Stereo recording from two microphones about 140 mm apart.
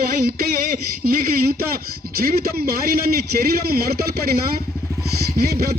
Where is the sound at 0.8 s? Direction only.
90° right.